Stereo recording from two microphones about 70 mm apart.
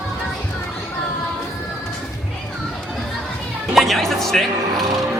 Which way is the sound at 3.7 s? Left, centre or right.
Centre.